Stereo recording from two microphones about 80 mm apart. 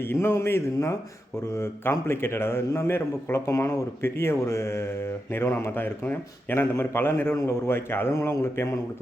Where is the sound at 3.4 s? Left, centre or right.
Left.